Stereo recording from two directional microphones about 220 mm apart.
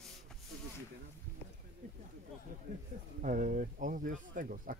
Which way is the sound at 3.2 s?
35° right (ahead or behind).